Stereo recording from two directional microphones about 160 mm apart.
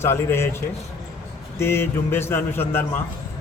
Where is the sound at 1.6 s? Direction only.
15° left (ahead or behind).